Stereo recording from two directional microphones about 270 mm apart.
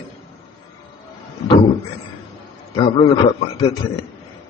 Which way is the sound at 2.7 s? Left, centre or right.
Centre.